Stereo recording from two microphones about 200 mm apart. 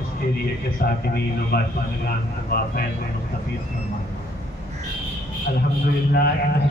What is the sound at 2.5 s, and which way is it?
Speech, 50° left (ahead or behind).